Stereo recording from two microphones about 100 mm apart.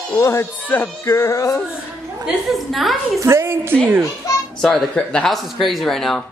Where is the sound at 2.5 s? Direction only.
Centre (ahead or behind).